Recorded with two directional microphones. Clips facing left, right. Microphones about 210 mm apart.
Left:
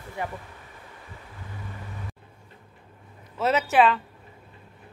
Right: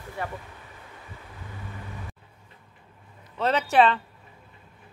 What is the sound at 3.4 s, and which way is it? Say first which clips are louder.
Speech: even; 5° left (ahead or behind).